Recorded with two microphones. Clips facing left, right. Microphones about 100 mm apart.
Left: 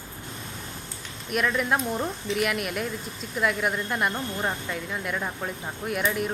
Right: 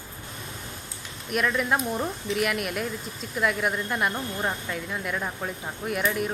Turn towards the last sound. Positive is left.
turn(degrees=0)  # may be behind; listen again after turning